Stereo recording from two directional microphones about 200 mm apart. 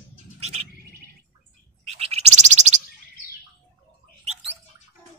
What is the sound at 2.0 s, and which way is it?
Bird, 30° right (ahead or behind).